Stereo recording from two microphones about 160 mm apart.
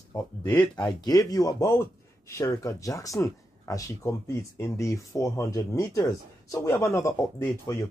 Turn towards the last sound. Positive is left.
turn(degrees=15)  # may be behind; listen again after turning